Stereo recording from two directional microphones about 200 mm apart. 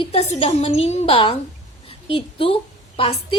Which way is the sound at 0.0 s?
30° left (ahead or behind).